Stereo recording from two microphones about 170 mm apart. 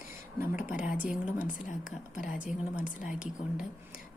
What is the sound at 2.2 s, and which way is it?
Speech, 50° left (ahead or behind).